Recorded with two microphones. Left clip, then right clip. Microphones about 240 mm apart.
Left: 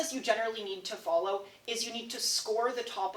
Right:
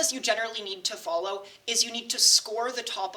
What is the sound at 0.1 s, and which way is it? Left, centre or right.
A woman's voice, right.